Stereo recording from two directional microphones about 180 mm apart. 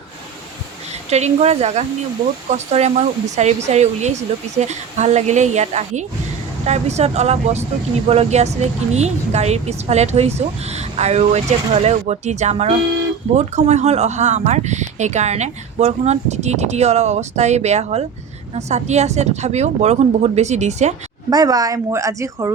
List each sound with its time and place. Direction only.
1.1 s speech: 35° right (ahead or behind)
21.2 s speech: 20° right (ahead or behind)